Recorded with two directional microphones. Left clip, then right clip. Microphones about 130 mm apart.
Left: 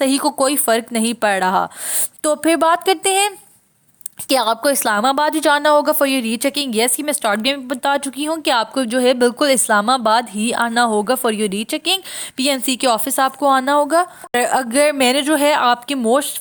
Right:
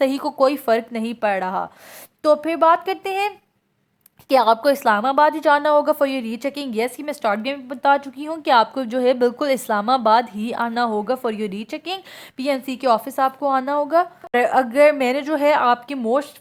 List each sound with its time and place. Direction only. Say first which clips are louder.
0.0 s a woman's voice: left 1 dB; 25° left (ahead or behind)
4.3 s a woman's voice: right 1 dB; 25° left (ahead or behind)
4.9 s a woman's voice: left 1 dB; 40° left (ahead or behind); by 16.3 s 25° left (ahead or behind)